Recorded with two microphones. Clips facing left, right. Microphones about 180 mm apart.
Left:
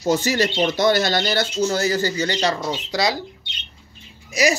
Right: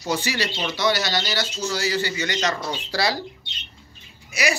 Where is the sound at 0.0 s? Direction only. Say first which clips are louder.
Left 6 dB; 45° left (ahead or behind).